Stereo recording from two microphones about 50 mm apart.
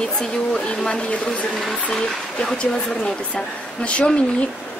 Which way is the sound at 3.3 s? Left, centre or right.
Left.